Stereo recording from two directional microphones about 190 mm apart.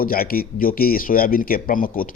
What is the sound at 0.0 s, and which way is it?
Speech, 50° left (ahead or behind).